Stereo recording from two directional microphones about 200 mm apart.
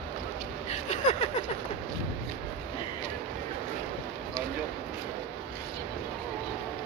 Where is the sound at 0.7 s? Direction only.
35° left (ahead or behind).